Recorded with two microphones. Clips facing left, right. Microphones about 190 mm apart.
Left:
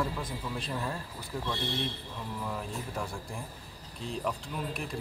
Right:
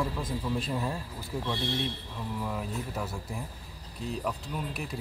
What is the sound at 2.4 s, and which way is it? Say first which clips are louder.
Speech: right 2 dB; 5° right (ahead or behind).